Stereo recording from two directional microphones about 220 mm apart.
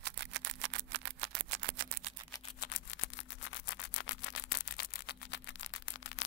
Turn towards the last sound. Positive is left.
turn(degrees=55)  # may be behind; listen again after turning